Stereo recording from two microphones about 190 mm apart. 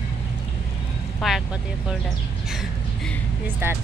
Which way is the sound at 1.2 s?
Centre (ahead or behind).